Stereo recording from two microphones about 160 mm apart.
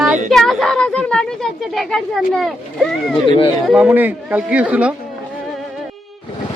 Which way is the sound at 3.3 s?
35° left (ahead or behind).